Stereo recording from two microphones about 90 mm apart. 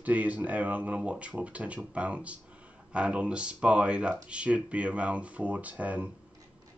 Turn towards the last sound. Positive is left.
turn(degrees=-15)  # may be behind; listen again after turning